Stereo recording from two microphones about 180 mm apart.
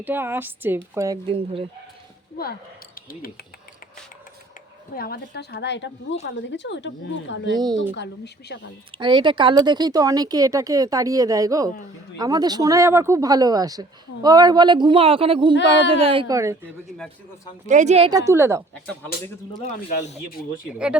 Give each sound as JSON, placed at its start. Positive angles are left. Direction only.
{"t": 0.0, "sound": "speech", "side_deg": -10}
{"t": 2.4, "sound": "speech", "side_deg": 55}
{"t": 4.9, "sound": "a woman's voice", "side_deg": 60}
{"t": 7.5, "sound": "speech", "side_deg": -25}
{"t": 7.9, "sound": "speech", "side_deg": 70}
{"t": 8.9, "sound": "speech", "side_deg": -25}
{"t": 16.3, "sound": "speech", "side_deg": -15}
{"t": 17.7, "sound": "a woman's voice", "side_deg": -40}
{"t": 18.1, "sound": "speech", "side_deg": -15}
{"t": 19.9, "sound": "speech", "side_deg": 40}
{"t": 20.7, "sound": "speech", "side_deg": -5}